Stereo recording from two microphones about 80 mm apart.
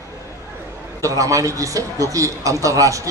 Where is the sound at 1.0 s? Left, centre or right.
Right.